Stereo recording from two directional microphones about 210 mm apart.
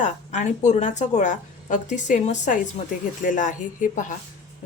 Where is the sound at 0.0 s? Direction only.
35° left (ahead or behind).